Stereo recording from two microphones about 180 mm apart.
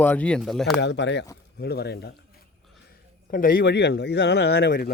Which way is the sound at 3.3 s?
50° left (ahead or behind).